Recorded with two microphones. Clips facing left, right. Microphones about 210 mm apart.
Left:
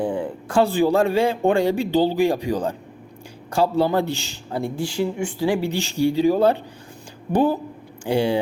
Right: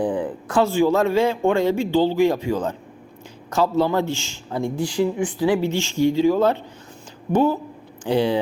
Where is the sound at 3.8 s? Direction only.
35° left (ahead or behind).